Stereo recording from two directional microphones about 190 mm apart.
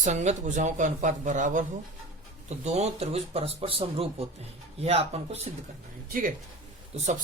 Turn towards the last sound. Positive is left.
turn(degrees=-35)  # may be behind; listen again after turning